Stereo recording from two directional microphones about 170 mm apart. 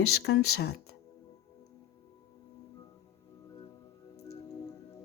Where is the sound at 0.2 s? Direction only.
85° left.